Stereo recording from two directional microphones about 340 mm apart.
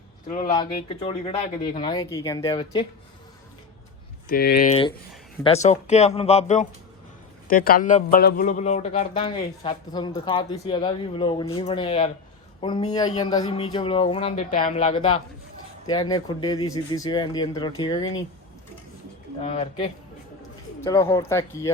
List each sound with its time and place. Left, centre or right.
0.3 s a man's voice: centre
4.3 s a man's voice: left
19.4 s a man's voice: centre